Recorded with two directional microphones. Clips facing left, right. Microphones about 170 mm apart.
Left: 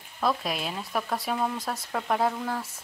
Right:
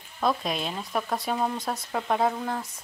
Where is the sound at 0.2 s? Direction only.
Centre (ahead or behind).